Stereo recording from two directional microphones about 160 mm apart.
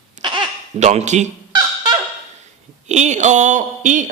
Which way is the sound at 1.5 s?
25° right (ahead or behind).